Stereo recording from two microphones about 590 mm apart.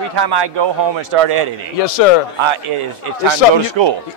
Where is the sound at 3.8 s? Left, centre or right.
Right.